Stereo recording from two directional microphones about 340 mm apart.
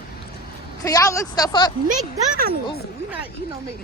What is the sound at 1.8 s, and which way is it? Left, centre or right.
Speech, right.